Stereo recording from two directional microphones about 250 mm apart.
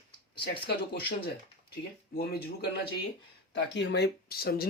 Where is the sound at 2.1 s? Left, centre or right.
Left.